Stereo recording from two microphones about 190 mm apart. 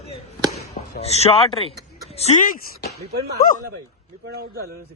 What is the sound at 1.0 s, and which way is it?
Speech, 35° left (ahead or behind).